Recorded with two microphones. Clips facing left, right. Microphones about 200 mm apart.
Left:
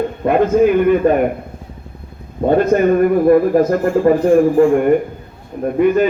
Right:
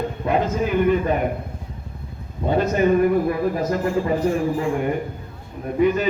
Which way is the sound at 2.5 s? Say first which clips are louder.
Left 6 dB; 55° left (ahead or behind).